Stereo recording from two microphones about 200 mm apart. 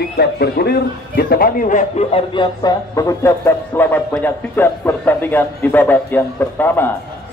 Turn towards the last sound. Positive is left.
turn(degrees=10)  # may be behind; listen again after turning